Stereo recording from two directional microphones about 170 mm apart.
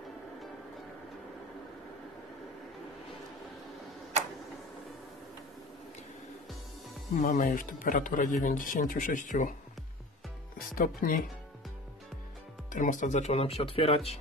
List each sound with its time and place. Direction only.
7.2 s speech: 55° left (ahead or behind)
10.7 s speech: 55° left (ahead or behind)
12.7 s speech: 50° left (ahead or behind)